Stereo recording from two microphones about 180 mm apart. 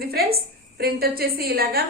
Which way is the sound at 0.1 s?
60° right (ahead or behind).